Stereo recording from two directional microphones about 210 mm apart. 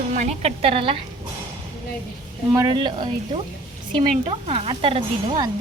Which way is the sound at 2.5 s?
20° right (ahead or behind).